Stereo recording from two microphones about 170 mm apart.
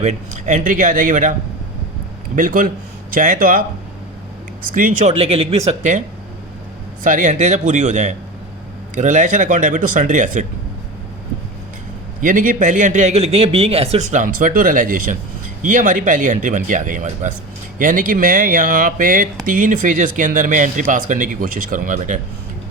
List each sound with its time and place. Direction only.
0.0 s a man's voice: 45° right (ahead or behind)
4.7 s speech: 50° right (ahead or behind)
7.0 s a man's voice: 50° right (ahead or behind)
12.2 s a man's voice: 50° right (ahead or behind)